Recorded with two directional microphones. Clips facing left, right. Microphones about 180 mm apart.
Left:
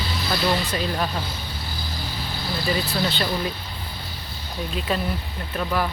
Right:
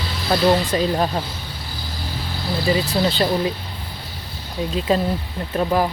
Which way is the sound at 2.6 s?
25° right (ahead or behind).